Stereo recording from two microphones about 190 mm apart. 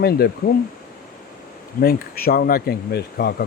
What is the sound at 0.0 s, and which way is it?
Speech, 55° left (ahead or behind).